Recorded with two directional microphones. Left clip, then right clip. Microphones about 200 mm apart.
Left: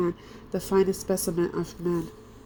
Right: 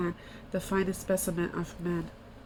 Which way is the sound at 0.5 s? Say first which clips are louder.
Left 7 dB; 10° left (ahead or behind).